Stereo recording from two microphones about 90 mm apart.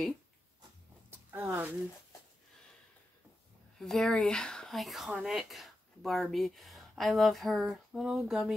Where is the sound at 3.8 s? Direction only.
5° left (ahead or behind).